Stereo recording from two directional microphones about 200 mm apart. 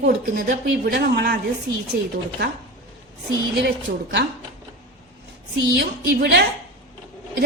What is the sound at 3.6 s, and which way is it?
Speech, 60° right (ahead or behind).